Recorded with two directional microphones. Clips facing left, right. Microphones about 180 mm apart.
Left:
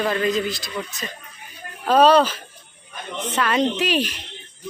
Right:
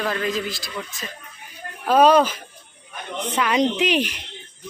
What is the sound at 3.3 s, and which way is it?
Speech, 15° right (ahead or behind).